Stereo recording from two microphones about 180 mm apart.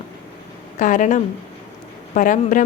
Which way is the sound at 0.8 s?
45° left (ahead or behind).